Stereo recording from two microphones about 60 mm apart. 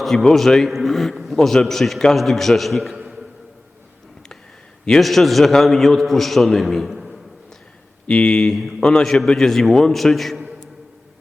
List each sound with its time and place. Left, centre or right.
0.0 s a man's voice: centre
2.9 s a sound: centre
4.9 s a man's voice: centre
8.0 s a man's voice: centre